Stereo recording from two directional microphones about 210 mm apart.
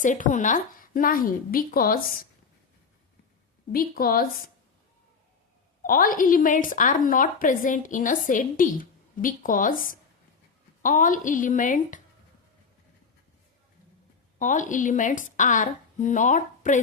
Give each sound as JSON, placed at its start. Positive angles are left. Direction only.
{"t": 0.0, "sound": "a woman's voice", "side_deg": 35}
{"t": 3.7, "sound": "a woman's voice", "side_deg": 45}
{"t": 5.8, "sound": "a woman's voice", "side_deg": 45}
{"t": 14.3, "sound": "a woman's voice", "side_deg": 35}